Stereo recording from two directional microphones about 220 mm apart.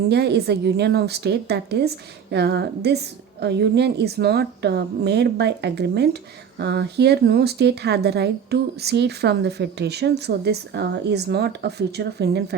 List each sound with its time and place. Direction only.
0.1 s speech: 50° right (ahead or behind)